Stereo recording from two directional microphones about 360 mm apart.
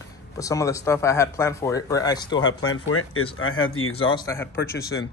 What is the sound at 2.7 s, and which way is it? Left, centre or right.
Speech, left.